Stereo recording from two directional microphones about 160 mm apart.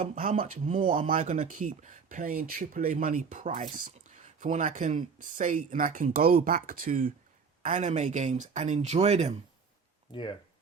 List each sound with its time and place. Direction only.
0.0 s speech: 60° right (ahead or behind); by 9.3 s 45° right (ahead or behind)
10.1 s speech: 30° left (ahead or behind)